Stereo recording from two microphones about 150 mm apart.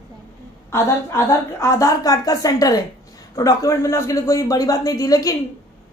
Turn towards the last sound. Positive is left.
turn(degrees=25)  # may be behind; listen again after turning